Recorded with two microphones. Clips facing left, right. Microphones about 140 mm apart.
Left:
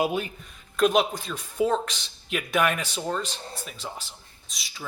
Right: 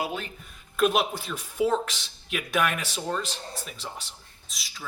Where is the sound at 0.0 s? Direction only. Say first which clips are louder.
Left 6 dB; 15° left (ahead or behind).